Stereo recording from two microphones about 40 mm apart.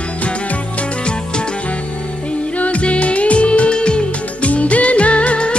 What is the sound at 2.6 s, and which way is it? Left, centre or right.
Music, left.